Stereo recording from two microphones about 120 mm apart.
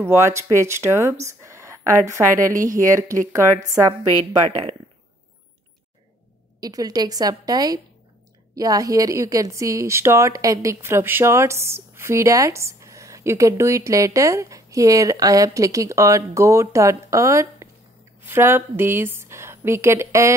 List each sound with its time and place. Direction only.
0.0 s speech: 20° right (ahead or behind)
6.6 s a woman's voice: 30° right (ahead or behind)